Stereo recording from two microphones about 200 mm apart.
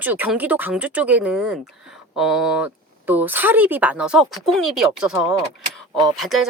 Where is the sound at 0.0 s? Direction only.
10° right (ahead or behind).